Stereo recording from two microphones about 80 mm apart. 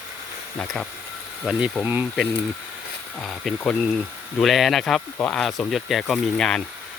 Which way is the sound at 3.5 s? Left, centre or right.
Centre.